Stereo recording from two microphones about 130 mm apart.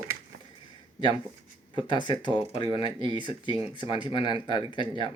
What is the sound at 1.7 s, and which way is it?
Speech, 35° left (ahead or behind).